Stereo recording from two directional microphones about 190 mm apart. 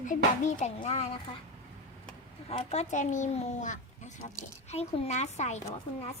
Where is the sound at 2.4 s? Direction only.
35° left (ahead or behind).